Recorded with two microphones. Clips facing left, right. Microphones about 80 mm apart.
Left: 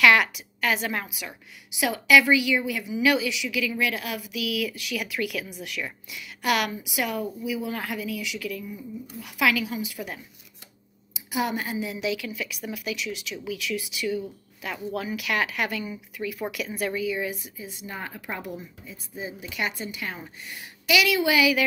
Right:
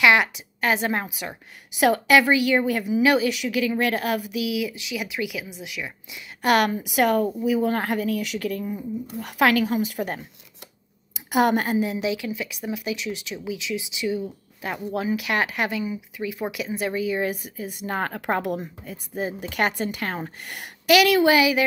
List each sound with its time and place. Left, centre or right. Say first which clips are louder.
0.0 s a sound: right 1 dB; right
0.6 s speech: right 3 dB; right
3.3 s speech: right 5 dB; right
4.4 s speech: right 3 dB; right
6.4 s speech: right 5 dB; right
6.8 s a woman's voice: right 8 dB; right
11.2 s a woman's voice: right 7 dB; right
11.8 s speech: right 4 dB; right
13.4 s speech: right 1 dB; right
15.8 s speech: right 4 dB; centre
17.0 s speech: right 4 dB; right